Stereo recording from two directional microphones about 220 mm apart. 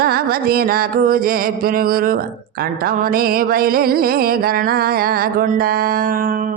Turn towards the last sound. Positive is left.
turn(degrees=-40)  # may be behind; listen again after turning